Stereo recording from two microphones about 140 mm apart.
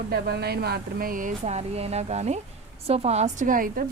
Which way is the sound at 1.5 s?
50° right (ahead or behind).